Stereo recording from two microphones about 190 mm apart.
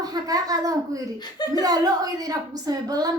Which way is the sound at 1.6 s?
20° right (ahead or behind).